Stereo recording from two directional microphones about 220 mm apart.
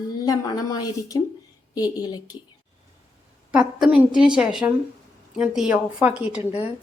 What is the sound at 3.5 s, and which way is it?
A woman's voice, 5° right (ahead or behind).